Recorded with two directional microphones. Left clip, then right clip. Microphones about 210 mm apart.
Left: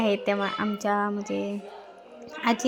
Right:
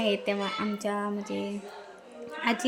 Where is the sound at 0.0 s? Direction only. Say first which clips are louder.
Left 3 dB; 10° left (ahead or behind).